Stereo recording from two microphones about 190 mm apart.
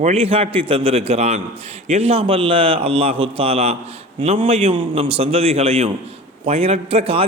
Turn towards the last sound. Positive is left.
turn(degrees=-30)  # may be behind; listen again after turning